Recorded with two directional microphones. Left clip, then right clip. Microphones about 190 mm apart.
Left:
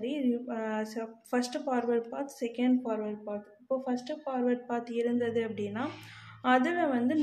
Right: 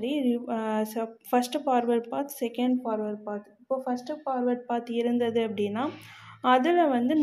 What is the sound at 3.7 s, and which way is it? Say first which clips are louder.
A woman's voice: right 3 dB; 20° right (ahead or behind).